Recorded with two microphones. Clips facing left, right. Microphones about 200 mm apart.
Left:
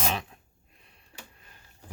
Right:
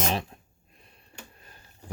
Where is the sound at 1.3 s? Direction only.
40° right (ahead or behind).